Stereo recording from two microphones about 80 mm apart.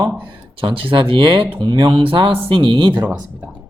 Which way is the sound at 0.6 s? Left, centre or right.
Right.